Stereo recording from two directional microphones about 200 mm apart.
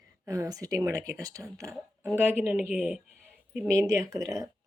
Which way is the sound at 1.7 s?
Centre (ahead or behind).